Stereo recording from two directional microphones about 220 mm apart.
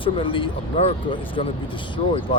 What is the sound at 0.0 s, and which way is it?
Speech, 25° left (ahead or behind).